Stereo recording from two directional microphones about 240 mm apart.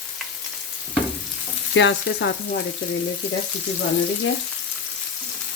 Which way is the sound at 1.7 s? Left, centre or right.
Left.